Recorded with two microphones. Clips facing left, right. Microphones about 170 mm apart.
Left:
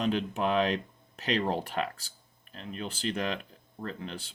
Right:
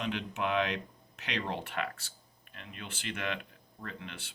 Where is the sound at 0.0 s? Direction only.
35° left (ahead or behind).